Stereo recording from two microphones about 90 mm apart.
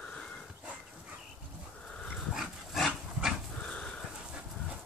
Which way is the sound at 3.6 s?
10° left (ahead or behind).